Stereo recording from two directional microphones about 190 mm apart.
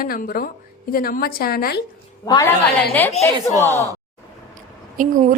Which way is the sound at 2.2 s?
20° left (ahead or behind).